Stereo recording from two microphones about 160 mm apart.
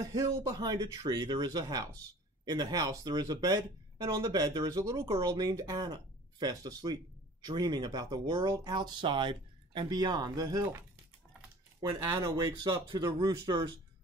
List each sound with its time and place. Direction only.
0.0 s speech: 20° right (ahead or behind)
12.0 s speech: 25° right (ahead or behind)